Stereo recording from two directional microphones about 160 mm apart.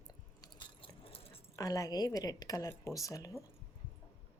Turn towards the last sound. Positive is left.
turn(degrees=20)  # may be behind; listen again after turning